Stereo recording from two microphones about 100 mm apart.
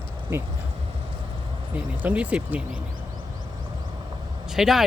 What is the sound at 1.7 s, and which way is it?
Speech, 15° right (ahead or behind).